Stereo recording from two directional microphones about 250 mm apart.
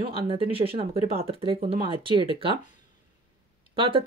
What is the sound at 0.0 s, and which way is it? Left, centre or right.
Speech, right.